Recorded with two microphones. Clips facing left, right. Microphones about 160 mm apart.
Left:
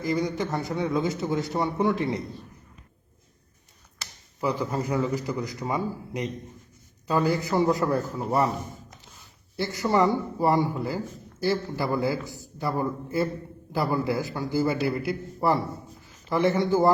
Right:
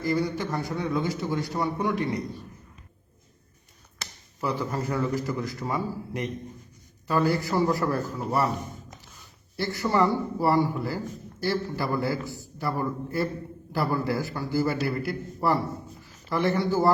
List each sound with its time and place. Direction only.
0.0 s a man's voice: 20° left (ahead or behind)
4.4 s a man's voice: 15° left (ahead or behind)
9.6 s a man's voice: 20° left (ahead or behind)